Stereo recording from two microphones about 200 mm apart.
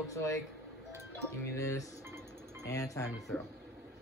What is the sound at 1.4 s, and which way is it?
A man's voice, 15° left (ahead or behind).